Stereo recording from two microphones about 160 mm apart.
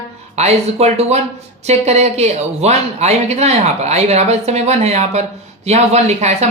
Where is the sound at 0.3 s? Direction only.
40° right (ahead or behind).